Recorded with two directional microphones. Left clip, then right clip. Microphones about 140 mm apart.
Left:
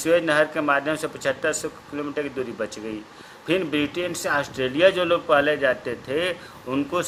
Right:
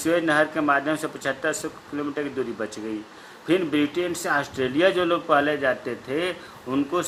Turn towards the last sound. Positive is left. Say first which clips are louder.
# even
turn(degrees=55)  # may be behind; listen again after turning